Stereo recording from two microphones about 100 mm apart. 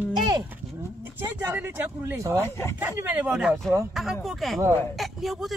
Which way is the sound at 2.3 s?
25° left (ahead or behind).